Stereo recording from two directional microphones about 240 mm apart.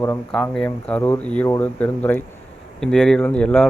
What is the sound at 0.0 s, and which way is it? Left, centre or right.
Speech, centre.